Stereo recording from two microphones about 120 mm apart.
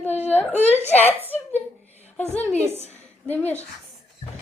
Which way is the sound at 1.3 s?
15° left (ahead or behind).